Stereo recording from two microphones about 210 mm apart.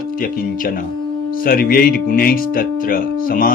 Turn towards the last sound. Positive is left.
turn(degrees=45)  # may be behind; listen again after turning